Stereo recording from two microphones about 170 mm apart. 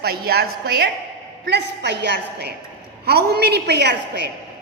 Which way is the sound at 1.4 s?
75° right (ahead or behind).